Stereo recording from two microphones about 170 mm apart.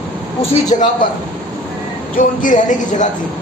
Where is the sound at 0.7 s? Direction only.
40° left (ahead or behind).